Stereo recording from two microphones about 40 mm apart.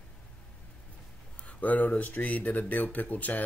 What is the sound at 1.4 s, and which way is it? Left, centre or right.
Speech, left.